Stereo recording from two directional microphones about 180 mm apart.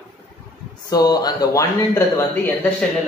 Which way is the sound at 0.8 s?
20° left (ahead or behind).